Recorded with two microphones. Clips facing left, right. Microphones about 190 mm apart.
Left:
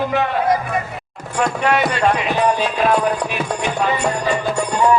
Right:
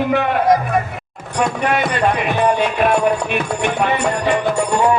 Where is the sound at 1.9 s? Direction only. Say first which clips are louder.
Even; 55° right (ahead or behind).